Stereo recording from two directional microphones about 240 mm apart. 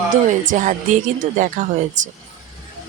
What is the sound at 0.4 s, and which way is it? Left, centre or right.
Speech, right.